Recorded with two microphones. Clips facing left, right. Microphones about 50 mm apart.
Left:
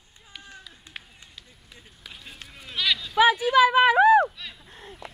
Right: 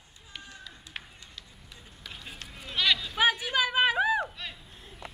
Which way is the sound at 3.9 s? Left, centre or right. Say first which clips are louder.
Left 10 dB; left.